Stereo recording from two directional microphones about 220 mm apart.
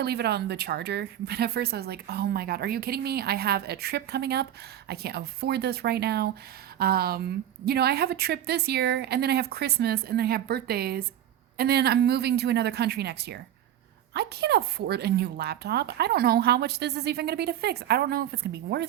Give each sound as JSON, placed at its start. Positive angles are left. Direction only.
{"t": 0.0, "sound": "a woman's voice", "side_deg": -50}